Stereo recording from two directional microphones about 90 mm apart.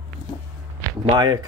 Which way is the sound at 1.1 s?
45° right (ahead or behind).